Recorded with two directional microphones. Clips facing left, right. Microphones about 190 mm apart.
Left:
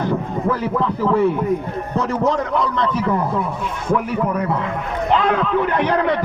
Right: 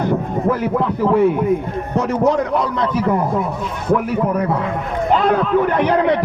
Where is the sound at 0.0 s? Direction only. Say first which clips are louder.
Right 2 dB; 20° right (ahead or behind).